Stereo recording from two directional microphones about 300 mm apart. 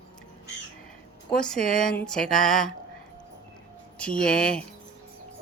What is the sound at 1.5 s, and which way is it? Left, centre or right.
Speech, left.